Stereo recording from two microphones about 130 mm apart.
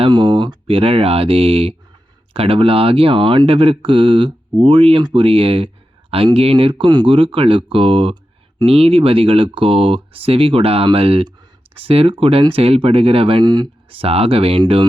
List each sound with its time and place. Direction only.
0.0 s speech: 35° right (ahead or behind)
14.1 s speech: 45° right (ahead or behind)